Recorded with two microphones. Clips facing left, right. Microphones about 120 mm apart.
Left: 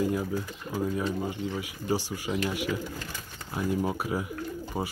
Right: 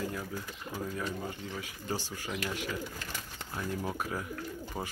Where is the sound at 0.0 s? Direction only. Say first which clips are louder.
Left 9 dB; 20° left (ahead or behind).